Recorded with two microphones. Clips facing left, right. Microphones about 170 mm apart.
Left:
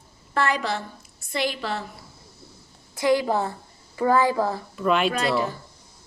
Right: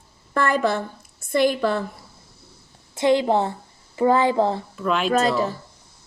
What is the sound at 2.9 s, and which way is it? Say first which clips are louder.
A woman's voice: right 3 dB; 25° right (ahead or behind).